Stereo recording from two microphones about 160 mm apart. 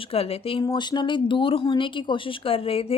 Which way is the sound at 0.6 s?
25° left (ahead or behind).